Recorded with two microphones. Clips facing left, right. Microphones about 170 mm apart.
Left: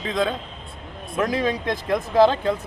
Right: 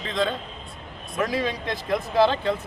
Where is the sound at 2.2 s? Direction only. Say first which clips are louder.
Left 4 dB; 15° left (ahead or behind).